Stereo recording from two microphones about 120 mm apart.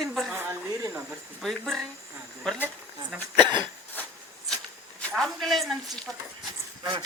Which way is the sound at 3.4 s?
40° right (ahead or behind).